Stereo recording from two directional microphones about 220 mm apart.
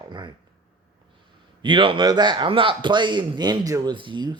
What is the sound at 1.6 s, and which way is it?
Speech, 20° right (ahead or behind).